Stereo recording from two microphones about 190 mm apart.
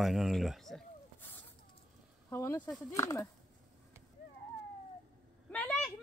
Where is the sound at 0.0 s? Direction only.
Centre (ahead or behind).